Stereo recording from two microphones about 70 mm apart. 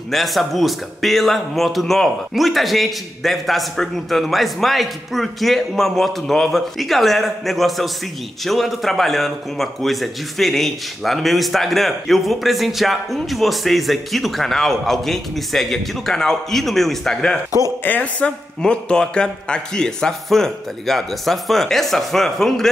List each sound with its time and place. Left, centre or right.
0.1 s speech: centre
17.8 s a woman's voice: left
18.6 s speech: centre